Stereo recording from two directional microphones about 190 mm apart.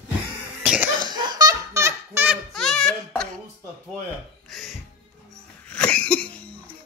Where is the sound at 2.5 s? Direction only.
Centre (ahead or behind).